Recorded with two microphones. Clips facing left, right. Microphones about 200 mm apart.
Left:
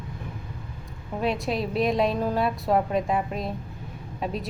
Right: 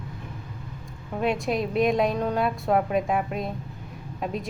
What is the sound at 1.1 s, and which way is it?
A woman's voice, centre (ahead or behind).